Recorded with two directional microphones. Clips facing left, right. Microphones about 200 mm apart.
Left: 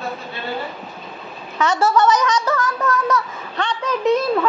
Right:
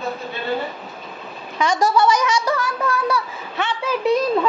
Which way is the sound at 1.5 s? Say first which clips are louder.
Left 1 dB; 15° right (ahead or behind).